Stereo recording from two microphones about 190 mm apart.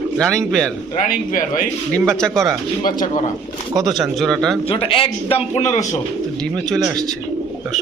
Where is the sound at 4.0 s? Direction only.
Centre (ahead or behind).